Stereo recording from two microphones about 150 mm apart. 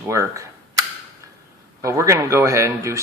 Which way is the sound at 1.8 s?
20° right (ahead or behind).